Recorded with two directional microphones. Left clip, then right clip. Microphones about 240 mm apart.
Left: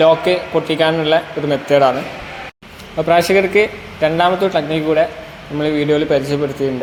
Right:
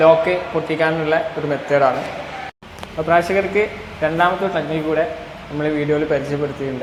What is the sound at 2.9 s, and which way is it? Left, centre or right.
Speech, left.